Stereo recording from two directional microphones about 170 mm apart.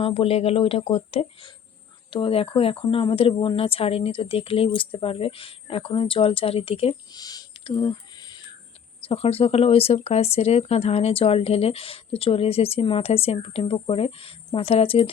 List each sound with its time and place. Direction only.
0.0 s speech: 35° left (ahead or behind)
7.1 s a sound: 20° left (ahead or behind)
9.0 s speech: 35° left (ahead or behind)